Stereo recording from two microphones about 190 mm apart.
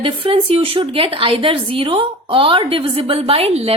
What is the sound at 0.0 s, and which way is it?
A woman's voice, 30° right (ahead or behind).